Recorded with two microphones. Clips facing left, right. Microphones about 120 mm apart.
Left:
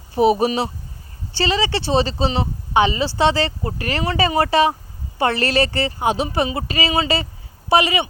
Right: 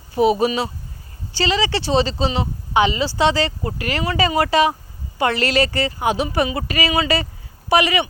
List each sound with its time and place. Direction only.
0.1 s speech: 30° left (ahead or behind)